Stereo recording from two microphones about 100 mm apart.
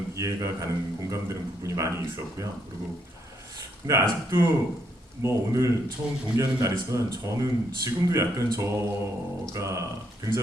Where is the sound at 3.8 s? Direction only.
30° right (ahead or behind).